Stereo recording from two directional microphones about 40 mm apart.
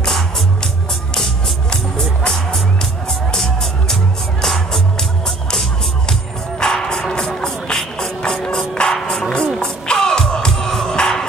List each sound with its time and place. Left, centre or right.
1.1 s music: centre
6.6 s music: centre